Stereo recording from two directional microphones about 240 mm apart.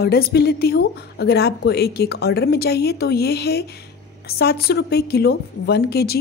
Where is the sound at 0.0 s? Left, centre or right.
Left.